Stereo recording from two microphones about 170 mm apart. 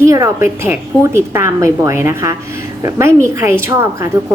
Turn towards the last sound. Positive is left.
turn(degrees=-15)  # may be behind; listen again after turning